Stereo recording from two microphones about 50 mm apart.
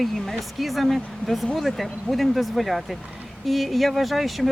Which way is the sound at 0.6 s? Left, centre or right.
Centre.